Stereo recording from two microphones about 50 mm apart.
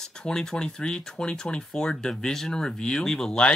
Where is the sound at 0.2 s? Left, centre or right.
Centre.